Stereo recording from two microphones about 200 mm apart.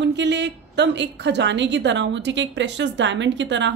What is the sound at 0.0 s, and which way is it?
A woman's voice, 60° right (ahead or behind).